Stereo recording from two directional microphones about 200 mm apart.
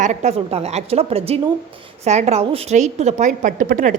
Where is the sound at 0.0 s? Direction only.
35° right (ahead or behind).